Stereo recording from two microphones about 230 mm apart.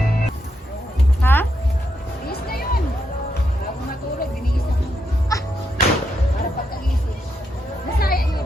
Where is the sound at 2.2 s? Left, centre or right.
Left.